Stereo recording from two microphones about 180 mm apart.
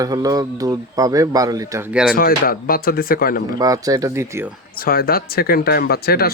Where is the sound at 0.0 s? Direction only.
20° right (ahead or behind).